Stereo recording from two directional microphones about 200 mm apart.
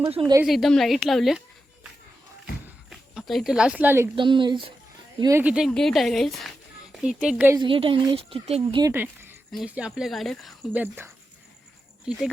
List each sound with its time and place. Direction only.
0.1 s speech: 25° right (ahead or behind)
0.4 s speech: centre (ahead or behind)
2.9 s speech: centre (ahead or behind)
4.1 s speech: 25° right (ahead or behind)
5.2 s speech: 10° right (ahead or behind)
7.6 s speech: 25° right (ahead or behind)
8.8 s speech: 10° right (ahead or behind)